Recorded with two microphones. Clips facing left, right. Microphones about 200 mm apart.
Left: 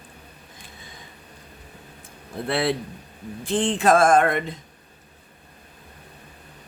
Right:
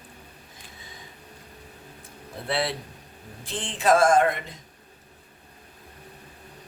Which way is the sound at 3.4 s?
50° left (ahead or behind).